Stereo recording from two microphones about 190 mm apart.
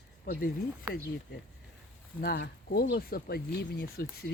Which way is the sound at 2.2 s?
55° left (ahead or behind).